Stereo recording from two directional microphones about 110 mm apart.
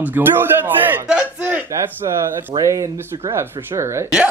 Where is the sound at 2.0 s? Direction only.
35° right (ahead or behind).